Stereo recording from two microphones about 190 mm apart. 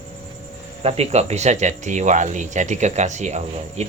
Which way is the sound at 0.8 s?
35° right (ahead or behind).